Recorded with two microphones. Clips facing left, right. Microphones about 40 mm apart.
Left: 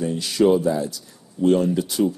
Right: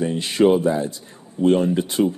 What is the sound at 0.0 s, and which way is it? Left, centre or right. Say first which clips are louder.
Speech: right 2 dB; right.